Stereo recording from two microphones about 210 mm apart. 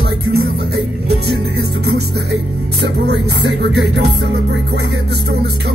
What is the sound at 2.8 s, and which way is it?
Speech, 55° right (ahead or behind).